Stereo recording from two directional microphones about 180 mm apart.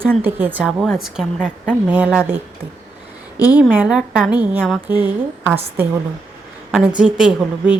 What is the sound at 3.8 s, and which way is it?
Speech, 5° right (ahead or behind).